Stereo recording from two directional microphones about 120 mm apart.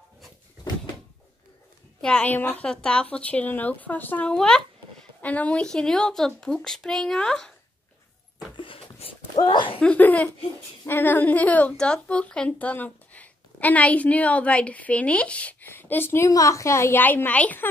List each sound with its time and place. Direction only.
2.0 s a woman's voice: 10° left (ahead or behind)
8.5 s a sound: 50° left (ahead or behind)
9.4 s speech: 40° left (ahead or behind)
9.8 s a woman's voice: 10° left (ahead or behind)